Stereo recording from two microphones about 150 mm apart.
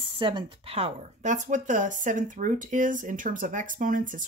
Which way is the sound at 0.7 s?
50° right (ahead or behind).